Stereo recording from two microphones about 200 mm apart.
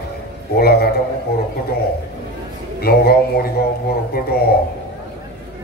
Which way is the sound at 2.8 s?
50° left (ahead or behind).